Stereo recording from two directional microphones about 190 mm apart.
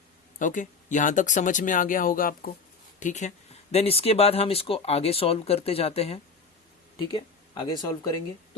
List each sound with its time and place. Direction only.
0.3 s speech: 40° left (ahead or behind)
7.6 s speech: 20° left (ahead or behind)